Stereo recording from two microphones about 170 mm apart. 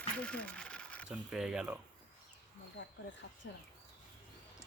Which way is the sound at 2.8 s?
90° left.